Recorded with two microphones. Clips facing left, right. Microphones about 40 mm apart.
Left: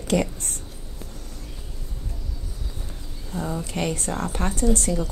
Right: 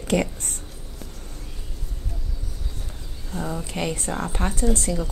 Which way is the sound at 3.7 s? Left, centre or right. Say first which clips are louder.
Left 1 dB; centre.